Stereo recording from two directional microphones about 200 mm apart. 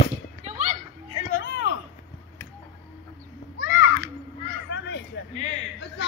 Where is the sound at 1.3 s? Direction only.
55° left (ahead or behind).